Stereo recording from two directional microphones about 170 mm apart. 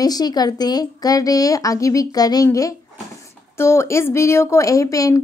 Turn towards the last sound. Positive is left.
turn(degrees=20)  # may be behind; listen again after turning